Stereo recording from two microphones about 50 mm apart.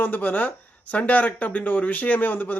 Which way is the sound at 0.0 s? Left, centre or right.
Left.